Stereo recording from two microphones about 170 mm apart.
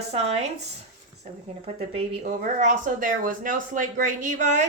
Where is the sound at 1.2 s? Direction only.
40° right (ahead or behind).